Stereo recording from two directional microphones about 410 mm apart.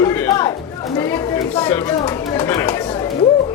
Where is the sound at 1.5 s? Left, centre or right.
Centre.